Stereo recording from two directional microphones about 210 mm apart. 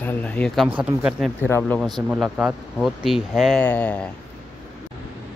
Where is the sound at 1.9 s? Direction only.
Centre (ahead or behind).